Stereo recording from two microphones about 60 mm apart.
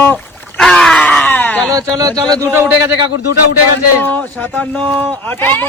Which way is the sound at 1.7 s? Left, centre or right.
Right.